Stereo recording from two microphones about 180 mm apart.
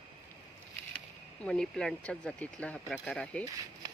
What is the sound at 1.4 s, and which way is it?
Speech, 5° left (ahead or behind).